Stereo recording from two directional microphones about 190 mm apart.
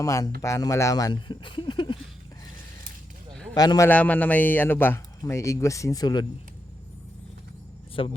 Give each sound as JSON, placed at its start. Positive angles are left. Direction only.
{"t": 0.0, "sound": "a man's voice", "side_deg": 15}
{"t": 3.5, "sound": "a man's voice", "side_deg": 20}
{"t": 8.0, "sound": "speech", "side_deg": 25}